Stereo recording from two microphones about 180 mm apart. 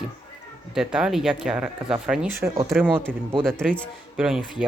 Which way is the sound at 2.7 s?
5° right (ahead or behind).